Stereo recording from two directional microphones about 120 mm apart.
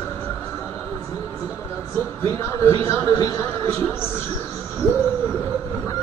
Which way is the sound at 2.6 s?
25° left (ahead or behind).